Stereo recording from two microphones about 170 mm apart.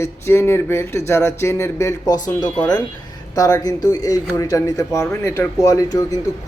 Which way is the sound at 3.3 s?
20° left (ahead or behind).